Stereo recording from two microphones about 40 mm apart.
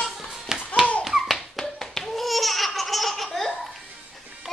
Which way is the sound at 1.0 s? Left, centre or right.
Centre.